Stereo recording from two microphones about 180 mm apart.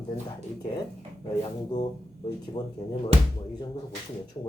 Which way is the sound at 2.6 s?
25° left (ahead or behind).